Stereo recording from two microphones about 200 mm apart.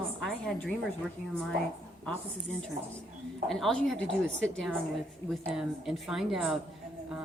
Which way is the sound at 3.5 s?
Centre (ahead or behind).